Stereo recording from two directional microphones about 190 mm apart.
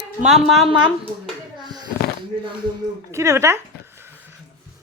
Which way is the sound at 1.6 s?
20° right (ahead or behind).